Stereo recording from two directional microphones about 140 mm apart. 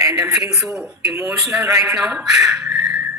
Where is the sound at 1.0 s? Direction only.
20° right (ahead or behind).